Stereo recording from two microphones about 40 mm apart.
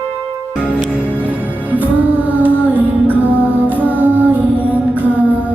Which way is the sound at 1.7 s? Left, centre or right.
Right.